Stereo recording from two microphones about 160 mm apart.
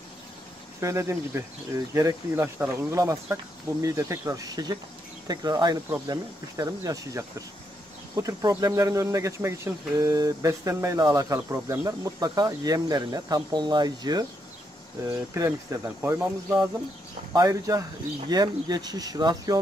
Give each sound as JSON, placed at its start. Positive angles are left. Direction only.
{"t": 0.7, "sound": "speech", "side_deg": -20}